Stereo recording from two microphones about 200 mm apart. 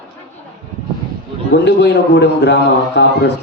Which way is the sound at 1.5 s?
60° left (ahead or behind).